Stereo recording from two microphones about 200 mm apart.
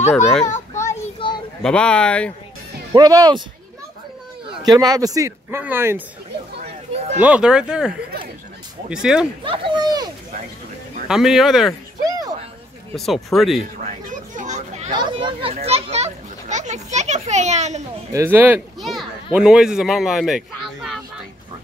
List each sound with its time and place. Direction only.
0.1 s speech: 5° left (ahead or behind)
1.2 s children playing: 25° left (ahead or behind)
1.6 s speech: 5° left (ahead or behind)
2.9 s speech: 20° right (ahead or behind)
4.6 s speech: 20° right (ahead or behind)
6.6 s a sound: 30° right (ahead or behind)
7.2 s speech: 5° right (ahead or behind)
9.4 s speech: 25° right (ahead or behind)
11.1 s speech: centre (ahead or behind)
12.1 s a sound: 20° right (ahead or behind)
12.9 s speech: centre (ahead or behind)
13.8 s children playing: 40° right (ahead or behind)
18.1 s a child's voice: 10° right (ahead or behind)